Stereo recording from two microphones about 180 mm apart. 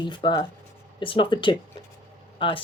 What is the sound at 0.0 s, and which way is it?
Speech, 25° left (ahead or behind).